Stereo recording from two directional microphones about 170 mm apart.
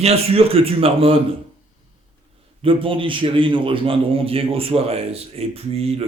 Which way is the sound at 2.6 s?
30° right (ahead or behind).